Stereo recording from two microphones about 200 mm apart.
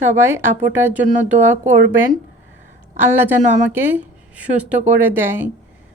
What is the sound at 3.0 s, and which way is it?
A woman's voice, 10° right (ahead or behind).